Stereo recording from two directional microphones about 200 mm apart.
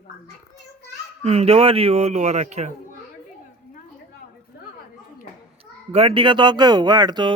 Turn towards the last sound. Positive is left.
turn(degrees=-20)  # may be behind; listen again after turning